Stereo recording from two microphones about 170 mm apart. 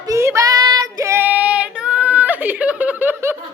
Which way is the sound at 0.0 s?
15° right (ahead or behind).